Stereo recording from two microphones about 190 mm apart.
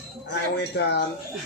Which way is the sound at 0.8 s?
60° left (ahead or behind).